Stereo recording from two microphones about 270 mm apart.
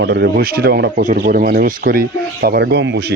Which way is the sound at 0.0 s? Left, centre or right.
Right.